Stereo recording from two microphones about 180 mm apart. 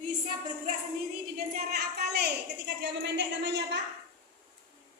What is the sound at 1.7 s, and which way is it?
Speech, 65° right (ahead or behind).